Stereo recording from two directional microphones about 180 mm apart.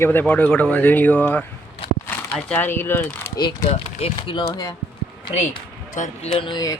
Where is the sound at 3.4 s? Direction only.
30° left (ahead or behind).